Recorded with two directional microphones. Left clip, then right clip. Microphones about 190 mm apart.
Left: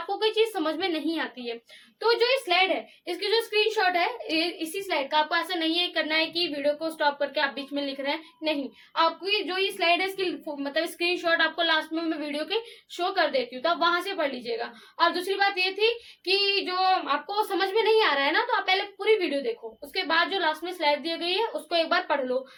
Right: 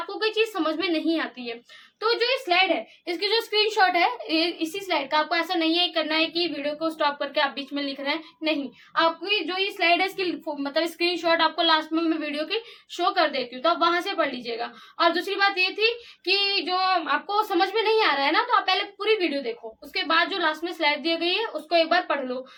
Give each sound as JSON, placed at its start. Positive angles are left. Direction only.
{"t": 0.2, "sound": "a woman's voice", "side_deg": -10}